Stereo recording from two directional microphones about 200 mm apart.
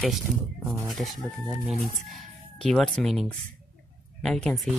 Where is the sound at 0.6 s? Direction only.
15° right (ahead or behind).